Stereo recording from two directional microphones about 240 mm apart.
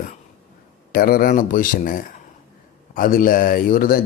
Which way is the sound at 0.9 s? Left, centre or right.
Left.